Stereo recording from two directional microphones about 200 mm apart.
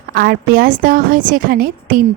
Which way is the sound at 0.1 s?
50° right (ahead or behind).